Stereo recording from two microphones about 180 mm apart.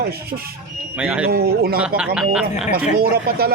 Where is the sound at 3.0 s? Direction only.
60° right (ahead or behind).